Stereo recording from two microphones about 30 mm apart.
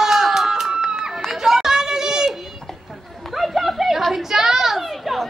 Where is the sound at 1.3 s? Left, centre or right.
Centre.